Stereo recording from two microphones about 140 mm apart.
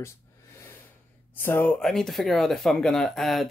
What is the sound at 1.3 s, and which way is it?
Speech, 15° left (ahead or behind).